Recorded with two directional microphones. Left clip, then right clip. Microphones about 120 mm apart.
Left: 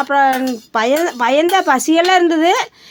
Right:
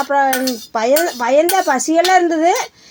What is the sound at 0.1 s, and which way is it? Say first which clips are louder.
Speech: left 2 dB; 15° left (ahead or behind).